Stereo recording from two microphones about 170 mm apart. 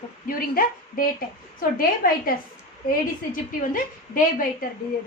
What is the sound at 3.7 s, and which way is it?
Speech, 55° left (ahead or behind).